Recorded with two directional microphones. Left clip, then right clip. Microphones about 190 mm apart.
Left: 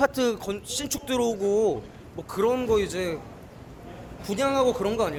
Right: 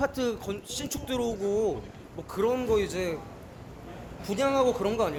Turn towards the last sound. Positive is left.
turn(degrees=5)  # may be behind; listen again after turning